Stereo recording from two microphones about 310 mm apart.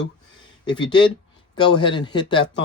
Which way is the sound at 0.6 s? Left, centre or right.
Centre.